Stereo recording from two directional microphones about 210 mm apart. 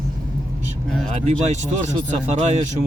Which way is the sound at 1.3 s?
35° right (ahead or behind).